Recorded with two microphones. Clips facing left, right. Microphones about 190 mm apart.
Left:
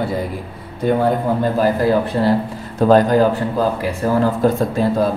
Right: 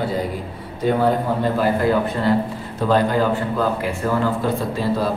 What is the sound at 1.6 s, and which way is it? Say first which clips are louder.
A man's voice: left 3 dB; 35° left (ahead or behind).